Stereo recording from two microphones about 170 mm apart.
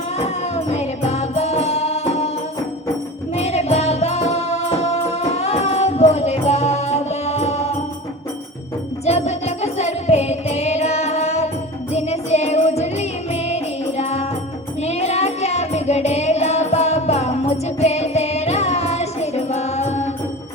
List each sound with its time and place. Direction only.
0.2 s music: 40° left (ahead or behind)
3.3 s music: 40° left (ahead or behind)
9.0 s music: 40° left (ahead or behind)